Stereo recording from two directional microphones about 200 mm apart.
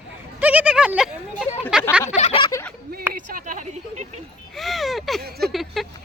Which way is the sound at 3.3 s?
40° right (ahead or behind).